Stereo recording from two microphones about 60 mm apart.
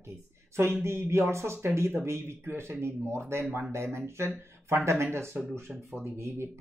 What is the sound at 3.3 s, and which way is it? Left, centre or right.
Speech, right.